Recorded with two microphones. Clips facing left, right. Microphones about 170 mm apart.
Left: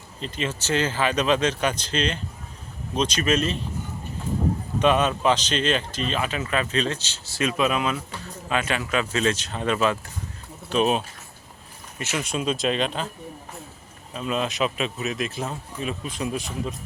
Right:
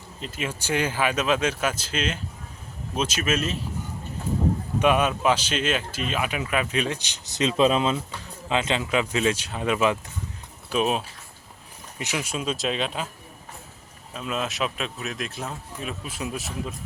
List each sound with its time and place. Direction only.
0.2 s speech: 5° right (ahead or behind)
4.8 s speech: 10° right (ahead or behind)
10.7 s speech: centre (ahead or behind)
11.9 s speech: 15° right (ahead or behind)
14.1 s speech: centre (ahead or behind)